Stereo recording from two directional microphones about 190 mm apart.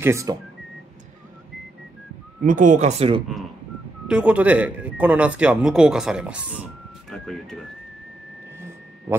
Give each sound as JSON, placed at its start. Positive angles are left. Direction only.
{"t": 0.0, "sound": "speech", "side_deg": -15}
{"t": 2.4, "sound": "speech", "side_deg": -45}
{"t": 4.1, "sound": "speech", "side_deg": -5}